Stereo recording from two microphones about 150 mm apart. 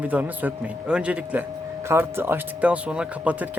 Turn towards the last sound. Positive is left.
turn(degrees=-10)  # may be behind; listen again after turning